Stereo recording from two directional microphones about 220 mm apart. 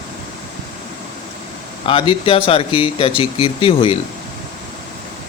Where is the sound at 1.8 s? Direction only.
25° left (ahead or behind).